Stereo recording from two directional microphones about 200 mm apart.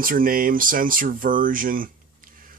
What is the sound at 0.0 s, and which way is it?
Speech, 45° right (ahead or behind).